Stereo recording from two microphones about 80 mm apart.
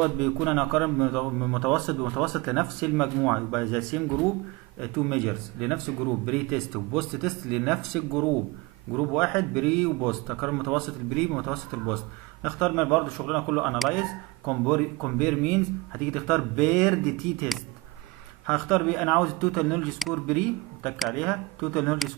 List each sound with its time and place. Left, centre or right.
0.0 s a man's voice: centre